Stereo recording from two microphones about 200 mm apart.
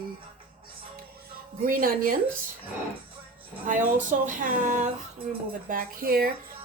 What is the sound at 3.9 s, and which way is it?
A woman's voice, 40° right (ahead or behind).